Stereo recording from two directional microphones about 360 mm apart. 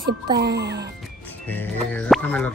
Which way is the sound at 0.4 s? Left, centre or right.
Right.